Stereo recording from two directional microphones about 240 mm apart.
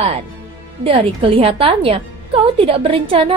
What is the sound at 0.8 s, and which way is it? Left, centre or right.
A woman's voice, right.